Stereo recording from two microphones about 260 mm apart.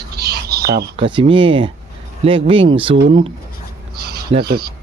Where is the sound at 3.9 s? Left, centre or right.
Right.